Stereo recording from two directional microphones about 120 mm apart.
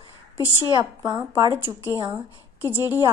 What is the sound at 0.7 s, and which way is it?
Speech, 40° right (ahead or behind).